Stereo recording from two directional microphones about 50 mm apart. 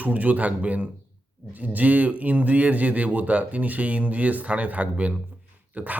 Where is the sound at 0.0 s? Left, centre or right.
Right.